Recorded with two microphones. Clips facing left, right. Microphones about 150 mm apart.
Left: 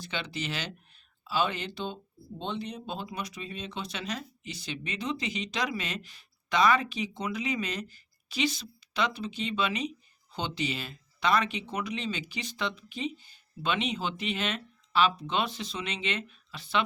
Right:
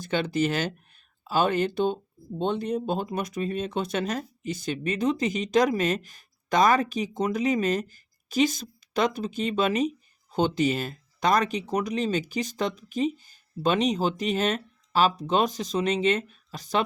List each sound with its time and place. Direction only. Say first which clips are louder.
0.0 s speech: right 11 dB; 50° right (ahead or behind)